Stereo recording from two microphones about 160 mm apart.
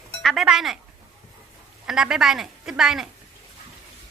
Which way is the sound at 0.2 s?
Centre (ahead or behind).